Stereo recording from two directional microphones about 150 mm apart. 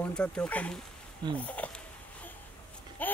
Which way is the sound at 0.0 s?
5° left (ahead or behind).